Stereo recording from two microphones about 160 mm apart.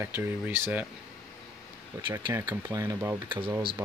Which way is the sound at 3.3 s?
30° right (ahead or behind).